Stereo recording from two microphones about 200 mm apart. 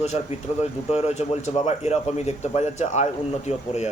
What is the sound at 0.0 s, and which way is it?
Speech, 35° left (ahead or behind).